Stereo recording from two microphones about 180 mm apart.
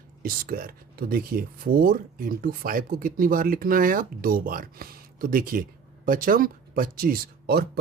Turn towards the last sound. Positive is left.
turn(degrees=-60)  # may be behind; listen again after turning